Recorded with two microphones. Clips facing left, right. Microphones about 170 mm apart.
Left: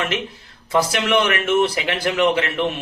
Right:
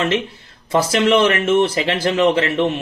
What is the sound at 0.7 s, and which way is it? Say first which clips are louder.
Speech: right 4 dB; 25° right (ahead or behind).